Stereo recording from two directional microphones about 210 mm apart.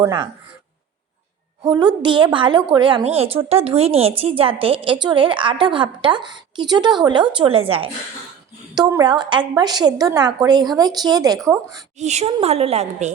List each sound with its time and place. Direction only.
0.0 s a woman's voice: 20° right (ahead or behind)
1.6 s a woman's voice: 20° right (ahead or behind)
11.9 s a woman's voice: 30° right (ahead or behind)